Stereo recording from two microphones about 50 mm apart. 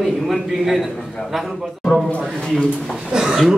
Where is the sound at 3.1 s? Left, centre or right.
Centre.